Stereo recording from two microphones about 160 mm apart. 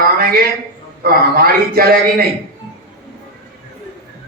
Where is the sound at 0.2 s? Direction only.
70° right (ahead or behind).